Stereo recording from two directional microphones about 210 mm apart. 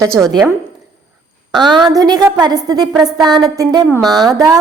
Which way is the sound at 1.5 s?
20° right (ahead or behind).